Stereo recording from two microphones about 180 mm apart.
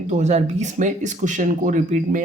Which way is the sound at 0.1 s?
40° right (ahead or behind).